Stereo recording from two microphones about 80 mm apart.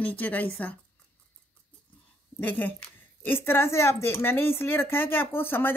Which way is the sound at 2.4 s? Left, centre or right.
Left.